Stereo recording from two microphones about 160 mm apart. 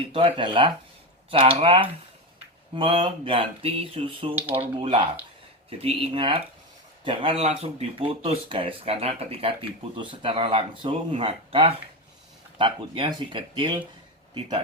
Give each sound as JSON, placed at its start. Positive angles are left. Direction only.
{"t": 0.1, "sound": "speech", "side_deg": -35}